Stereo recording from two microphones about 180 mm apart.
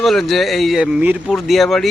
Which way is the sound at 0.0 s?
Centre (ahead or behind).